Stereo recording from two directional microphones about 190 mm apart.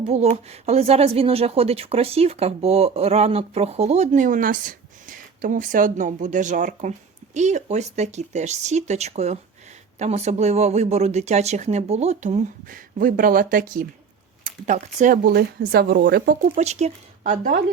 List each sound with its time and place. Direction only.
0.1 s speech: 35° right (ahead or behind)